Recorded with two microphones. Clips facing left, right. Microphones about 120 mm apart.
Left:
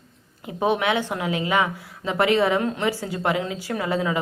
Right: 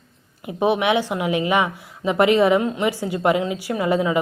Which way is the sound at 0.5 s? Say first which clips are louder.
Right 3 dB; 15° right (ahead or behind).